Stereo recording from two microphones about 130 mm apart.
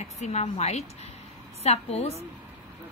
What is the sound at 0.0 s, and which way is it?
A woman's voice, 60° left (ahead or behind).